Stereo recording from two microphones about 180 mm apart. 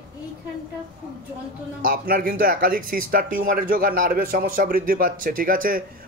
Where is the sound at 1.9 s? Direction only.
50° right (ahead or behind).